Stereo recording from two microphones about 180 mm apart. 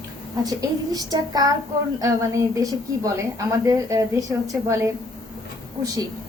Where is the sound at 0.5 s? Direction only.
20° right (ahead or behind).